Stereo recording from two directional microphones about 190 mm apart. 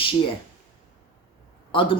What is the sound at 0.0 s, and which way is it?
Speech, 30° left (ahead or behind).